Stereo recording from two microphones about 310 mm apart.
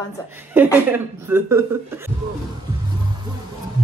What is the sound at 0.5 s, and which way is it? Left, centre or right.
Speech, centre.